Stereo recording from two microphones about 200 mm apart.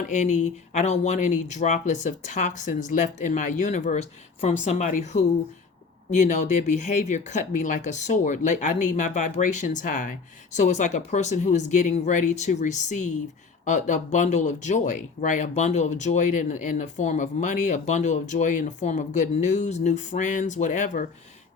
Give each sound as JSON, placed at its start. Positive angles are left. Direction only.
{"t": 0.0, "sound": "speech", "side_deg": 35}